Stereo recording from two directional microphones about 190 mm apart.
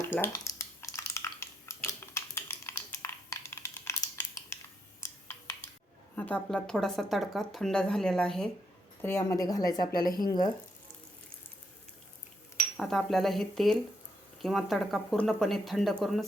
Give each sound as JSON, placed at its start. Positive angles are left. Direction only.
{"t": 0.1, "sound": "a sound", "side_deg": 10}
{"t": 6.1, "sound": "a woman's voice", "side_deg": 10}
{"t": 12.7, "sound": "speech", "side_deg": 0}